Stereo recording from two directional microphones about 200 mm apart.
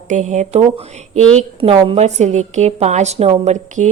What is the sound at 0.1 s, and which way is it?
A woman's voice, 35° right (ahead or behind).